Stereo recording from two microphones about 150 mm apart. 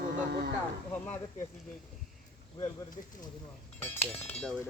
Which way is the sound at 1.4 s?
55° left (ahead or behind).